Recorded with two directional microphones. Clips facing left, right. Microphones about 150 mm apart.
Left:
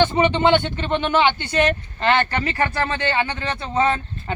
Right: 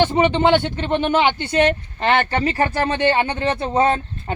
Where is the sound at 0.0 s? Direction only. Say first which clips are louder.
Right 1 dB; 10° right (ahead or behind).